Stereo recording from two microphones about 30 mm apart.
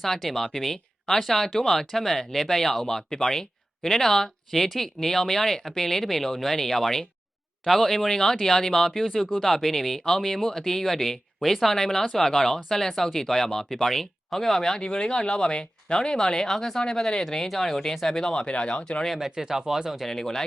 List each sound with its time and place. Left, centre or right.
0.0 s speech: centre
18.0 s speech: centre
18.4 s speech: left
19.2 s speech: centre
20.1 s speech: centre